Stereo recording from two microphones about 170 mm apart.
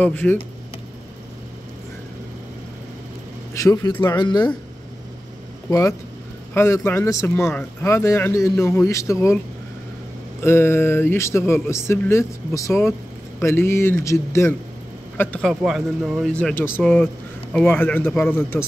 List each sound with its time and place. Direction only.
0.0 s speech: 10° left (ahead or behind)
3.5 s speech: 20° left (ahead or behind)
5.7 s speech: 20° left (ahead or behind)
10.4 s speech: 15° left (ahead or behind)
15.6 s speech: centre (ahead or behind)